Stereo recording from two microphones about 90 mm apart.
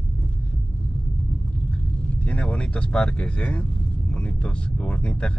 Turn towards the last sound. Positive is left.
turn(degrees=10)  # may be behind; listen again after turning